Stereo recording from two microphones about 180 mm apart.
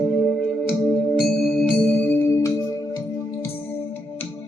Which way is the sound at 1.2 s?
Centre (ahead or behind).